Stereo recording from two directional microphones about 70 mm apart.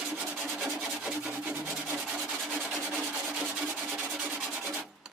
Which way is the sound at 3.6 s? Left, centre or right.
Centre.